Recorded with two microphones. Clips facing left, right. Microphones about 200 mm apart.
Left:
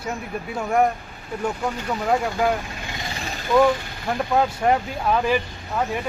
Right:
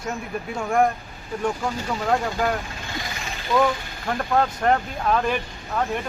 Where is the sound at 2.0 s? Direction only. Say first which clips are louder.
Left 2 dB; 5° left (ahead or behind).